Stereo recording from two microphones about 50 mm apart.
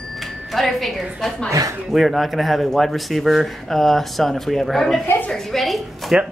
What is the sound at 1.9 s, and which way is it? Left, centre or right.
A man's voice, centre.